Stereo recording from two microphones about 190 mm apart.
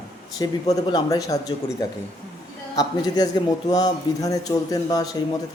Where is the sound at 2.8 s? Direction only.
20° left (ahead or behind).